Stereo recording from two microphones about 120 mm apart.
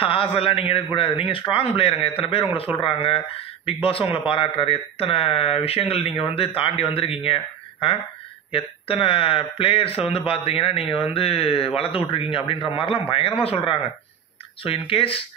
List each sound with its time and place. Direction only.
0.0 s a man's voice: 50° left (ahead or behind)
8.5 s speech: 50° left (ahead or behind)
14.6 s speech: 50° left (ahead or behind)